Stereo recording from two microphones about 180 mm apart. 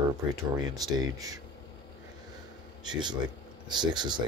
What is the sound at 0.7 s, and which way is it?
Speech, 20° right (ahead or behind).